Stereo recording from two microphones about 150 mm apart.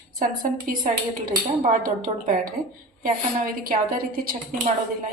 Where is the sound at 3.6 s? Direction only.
75° right (ahead or behind).